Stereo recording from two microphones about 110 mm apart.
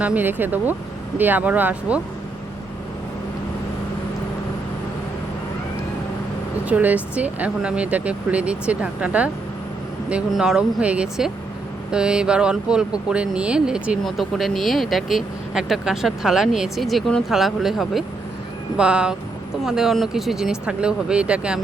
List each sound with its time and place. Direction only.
0.0 s speech: 15° right (ahead or behind)
6.7 s speech: 15° right (ahead or behind)